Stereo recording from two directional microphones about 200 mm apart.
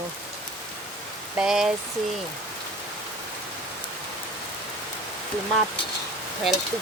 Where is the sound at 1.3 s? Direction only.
5° right (ahead or behind).